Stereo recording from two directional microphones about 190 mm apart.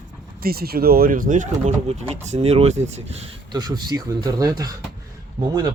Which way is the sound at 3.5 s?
20° right (ahead or behind).